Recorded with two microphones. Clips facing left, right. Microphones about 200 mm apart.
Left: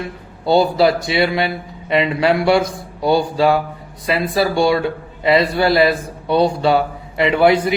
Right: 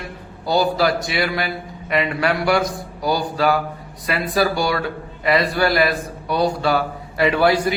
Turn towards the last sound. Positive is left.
turn(degrees=20)  # may be behind; listen again after turning